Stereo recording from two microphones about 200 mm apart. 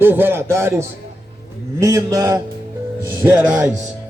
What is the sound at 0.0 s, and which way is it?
Speech, 10° right (ahead or behind).